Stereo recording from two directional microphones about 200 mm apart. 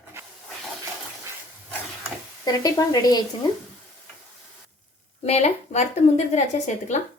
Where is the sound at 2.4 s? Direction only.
20° left (ahead or behind).